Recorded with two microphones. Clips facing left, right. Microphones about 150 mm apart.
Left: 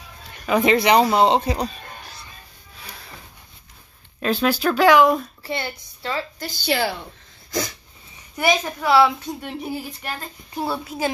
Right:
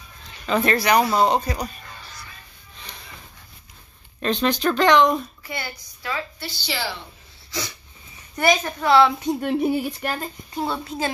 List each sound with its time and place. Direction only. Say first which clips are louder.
0.5 s speech: left 3 dB; 15° left (ahead or behind)
1.9 s music: left 3 dB; 50° left (ahead or behind)
2.7 s a sound: left 1 dB; 5° left (ahead or behind)
4.2 s speech: left 1 dB; 5° left (ahead or behind)
5.4 s speech: left 5 dB; 25° left (ahead or behind)
6.4 s a woman's voice: left 6 dB; 50° left (ahead or behind)
7.5 s a sound: left 6 dB; 50° left (ahead or behind)
8.4 s a woman's voice: right 1 dB; 10° left (ahead or behind)
9.4 s speech: right 8 dB; 60° right (ahead or behind)
10.5 s a woman's voice: left 1 dB; 10° left (ahead or behind)